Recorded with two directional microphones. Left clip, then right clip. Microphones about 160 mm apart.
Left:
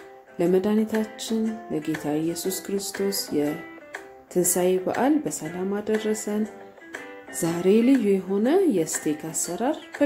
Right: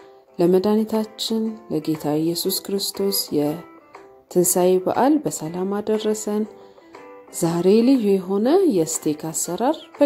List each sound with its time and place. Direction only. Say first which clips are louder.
0.4 s a woman's voice: right 4 dB; 55° right (ahead or behind)